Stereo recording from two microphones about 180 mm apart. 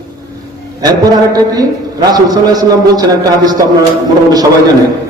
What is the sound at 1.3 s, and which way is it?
A man's voice, 20° right (ahead or behind).